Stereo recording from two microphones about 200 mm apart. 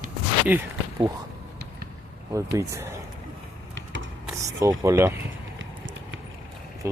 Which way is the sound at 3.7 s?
65° right (ahead or behind).